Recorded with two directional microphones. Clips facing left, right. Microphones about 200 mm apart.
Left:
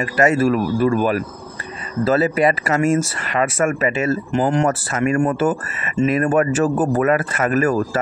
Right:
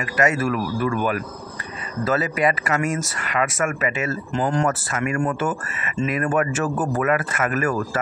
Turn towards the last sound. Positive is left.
turn(degrees=30)  # may be behind; listen again after turning